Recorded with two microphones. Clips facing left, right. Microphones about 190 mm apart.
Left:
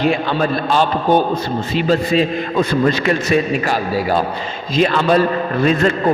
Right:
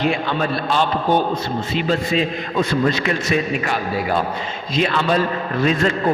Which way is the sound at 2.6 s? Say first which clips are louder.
Left 2 dB; 45° left (ahead or behind).